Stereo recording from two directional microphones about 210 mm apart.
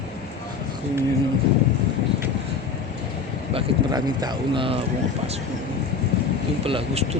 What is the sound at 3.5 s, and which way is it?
Speech, 20° right (ahead or behind).